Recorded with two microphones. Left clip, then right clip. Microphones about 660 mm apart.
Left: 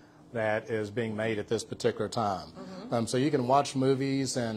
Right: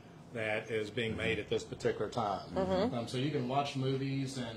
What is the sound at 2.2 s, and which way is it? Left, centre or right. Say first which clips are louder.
Speech: left 2 dB; left.